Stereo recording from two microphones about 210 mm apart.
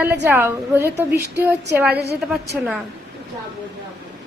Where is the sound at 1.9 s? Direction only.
50° right (ahead or behind).